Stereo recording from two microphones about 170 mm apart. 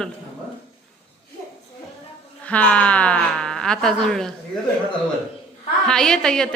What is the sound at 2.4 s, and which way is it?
Speech, 10° left (ahead or behind).